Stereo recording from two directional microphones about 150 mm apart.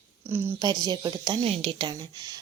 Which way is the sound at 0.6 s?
30° right (ahead or behind).